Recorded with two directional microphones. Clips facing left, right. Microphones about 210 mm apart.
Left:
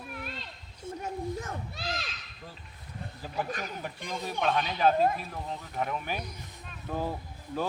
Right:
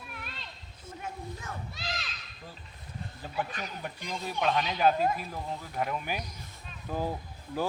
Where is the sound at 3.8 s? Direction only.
Centre (ahead or behind).